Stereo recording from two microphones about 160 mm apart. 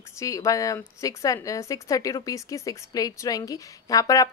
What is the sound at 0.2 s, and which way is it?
A woman's voice, 20° left (ahead or behind).